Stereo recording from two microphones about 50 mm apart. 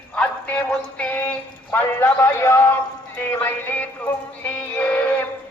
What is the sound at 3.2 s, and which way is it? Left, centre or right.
Music, left.